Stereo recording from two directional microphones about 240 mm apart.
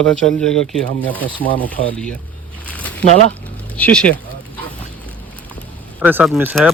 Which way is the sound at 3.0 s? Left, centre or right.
Left.